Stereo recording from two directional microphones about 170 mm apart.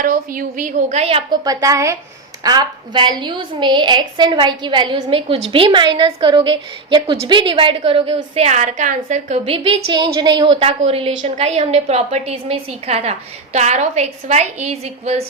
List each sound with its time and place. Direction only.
0.0 s a woman's voice: 55° right (ahead or behind); by 1.4 s 35° right (ahead or behind)
1.5 s a woman's voice: 20° right (ahead or behind); by 9.6 s 40° right (ahead or behind)
9.6 s a woman's voice: 25° right (ahead or behind)